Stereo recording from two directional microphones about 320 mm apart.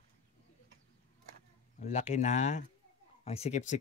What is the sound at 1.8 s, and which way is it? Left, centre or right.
Speech, left.